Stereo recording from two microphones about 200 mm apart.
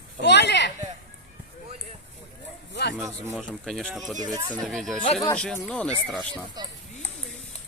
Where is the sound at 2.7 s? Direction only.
60° left (ahead or behind).